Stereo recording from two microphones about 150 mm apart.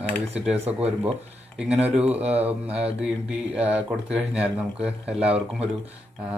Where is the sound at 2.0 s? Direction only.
10° right (ahead or behind).